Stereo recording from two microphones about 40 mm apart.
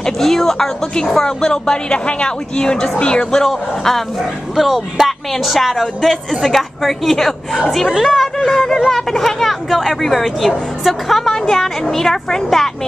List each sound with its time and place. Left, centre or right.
0.0 s a woman's voice: centre
4.6 s a woman's voice: centre